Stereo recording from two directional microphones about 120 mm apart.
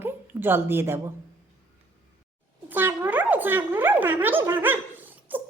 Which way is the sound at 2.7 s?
15° right (ahead or behind).